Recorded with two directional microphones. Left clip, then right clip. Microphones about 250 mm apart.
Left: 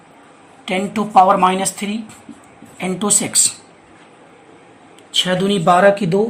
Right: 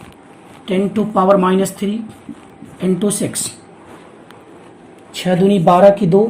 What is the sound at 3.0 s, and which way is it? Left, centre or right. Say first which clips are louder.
Speech: left 4 dB; left.